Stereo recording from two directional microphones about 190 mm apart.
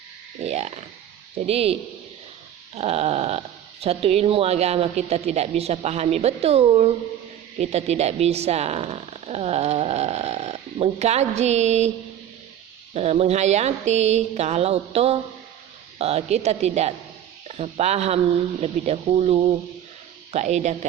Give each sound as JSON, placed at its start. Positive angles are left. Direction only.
{"t": 0.4, "sound": "speech", "side_deg": -35}
{"t": 12.9, "sound": "speech", "side_deg": -35}